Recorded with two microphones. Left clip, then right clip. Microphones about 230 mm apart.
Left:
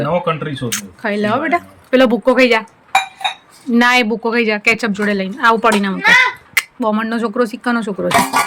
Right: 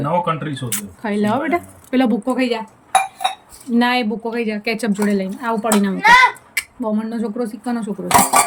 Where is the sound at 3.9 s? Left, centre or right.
Centre.